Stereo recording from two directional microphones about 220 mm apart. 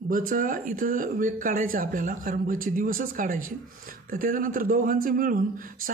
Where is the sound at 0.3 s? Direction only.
40° right (ahead or behind).